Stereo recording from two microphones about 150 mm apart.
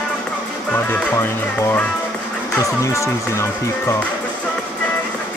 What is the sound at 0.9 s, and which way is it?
Speech, 10° left (ahead or behind).